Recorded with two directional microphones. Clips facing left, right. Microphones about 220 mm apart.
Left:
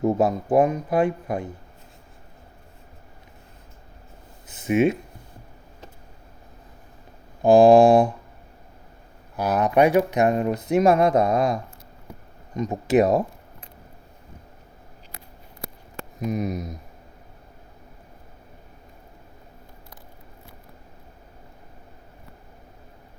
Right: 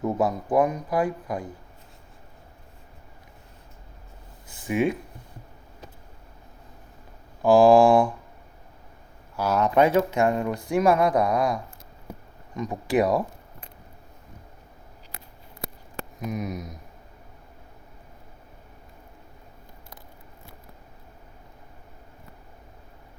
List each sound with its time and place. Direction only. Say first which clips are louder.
0.0 s speech: left 4 dB; 25° left (ahead or behind)
4.4 s speech: left 4 dB; 20° left (ahead or behind)
7.4 s speech: left 3 dB; 20° left (ahead or behind)
9.3 s speech: left 1 dB; 15° left (ahead or behind)
16.2 s speech: left 5 dB; 30° left (ahead or behind)